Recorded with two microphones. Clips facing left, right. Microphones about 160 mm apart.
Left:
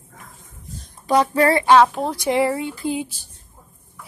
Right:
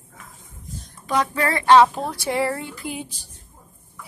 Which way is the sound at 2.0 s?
20° left (ahead or behind).